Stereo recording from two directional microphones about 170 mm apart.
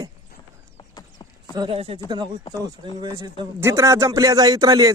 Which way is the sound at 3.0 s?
25° right (ahead or behind).